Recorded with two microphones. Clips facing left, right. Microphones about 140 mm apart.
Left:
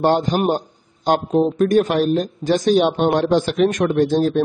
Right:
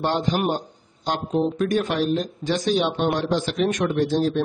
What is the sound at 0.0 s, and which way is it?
Speech, 45° left (ahead or behind).